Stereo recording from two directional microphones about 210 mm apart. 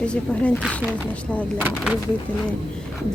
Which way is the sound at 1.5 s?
5° right (ahead or behind).